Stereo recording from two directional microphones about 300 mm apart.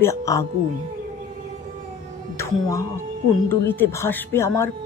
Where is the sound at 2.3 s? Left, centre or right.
Centre.